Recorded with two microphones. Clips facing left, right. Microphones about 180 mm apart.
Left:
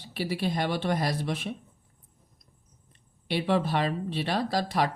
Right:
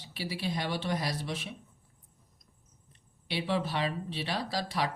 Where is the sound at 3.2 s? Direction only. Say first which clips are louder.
Left 5 dB; 50° left (ahead or behind).